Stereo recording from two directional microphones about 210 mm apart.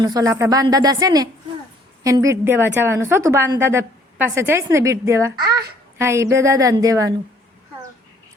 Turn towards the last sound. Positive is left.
turn(degrees=-15)  # may be behind; listen again after turning